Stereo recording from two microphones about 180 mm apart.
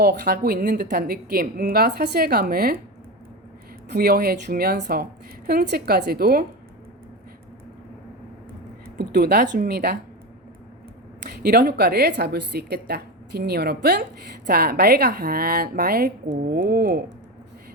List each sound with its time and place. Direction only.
0.0 s speech: 60° right (ahead or behind)
3.9 s speech: 55° right (ahead or behind)
9.0 s speech: 60° right (ahead or behind)
11.3 s speech: 60° right (ahead or behind)